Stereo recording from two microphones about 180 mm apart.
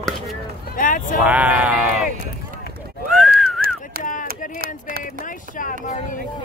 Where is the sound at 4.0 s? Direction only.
45° left (ahead or behind).